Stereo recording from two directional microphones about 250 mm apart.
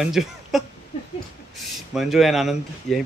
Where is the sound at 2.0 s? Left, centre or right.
Centre.